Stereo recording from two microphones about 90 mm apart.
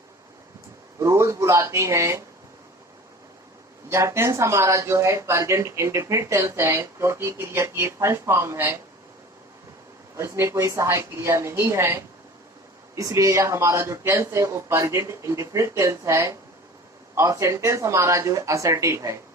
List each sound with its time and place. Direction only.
0.9 s speech: 35° right (ahead or behind)
3.8 s speech: 30° right (ahead or behind)
10.2 s speech: 30° right (ahead or behind)
13.0 s speech: 40° right (ahead or behind)